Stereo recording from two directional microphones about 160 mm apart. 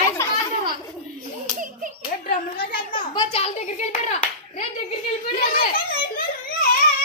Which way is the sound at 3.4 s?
40° left (ahead or behind).